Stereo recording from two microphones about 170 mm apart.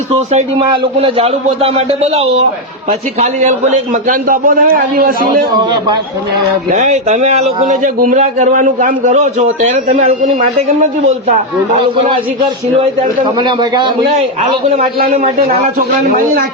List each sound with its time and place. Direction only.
0.9 s a man's voice: 35° right (ahead or behind); by 5.4 s 55° right (ahead or behind)
6.7 s a man's voice: 45° right (ahead or behind)
13.2 s a man's voice: 25° right (ahead or behind)
14.8 s a man's voice: 50° right (ahead or behind)